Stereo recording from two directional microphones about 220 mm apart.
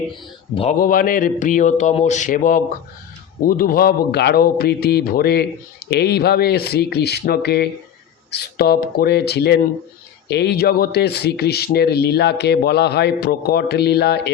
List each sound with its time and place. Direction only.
0.5 s a man's voice: 25° left (ahead or behind)
0.8 s a man's voice: 40° left (ahead or behind)